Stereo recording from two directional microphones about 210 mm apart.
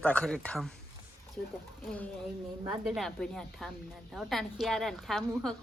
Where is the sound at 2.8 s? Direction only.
Centre (ahead or behind).